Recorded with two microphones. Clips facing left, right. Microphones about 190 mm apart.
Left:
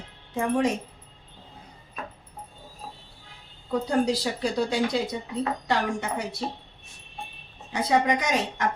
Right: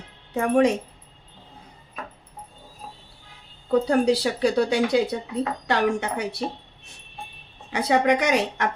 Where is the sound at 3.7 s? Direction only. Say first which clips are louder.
Right 5 dB; 70° right (ahead or behind).